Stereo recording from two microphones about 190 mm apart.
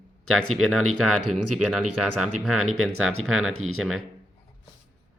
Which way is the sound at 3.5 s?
90° right.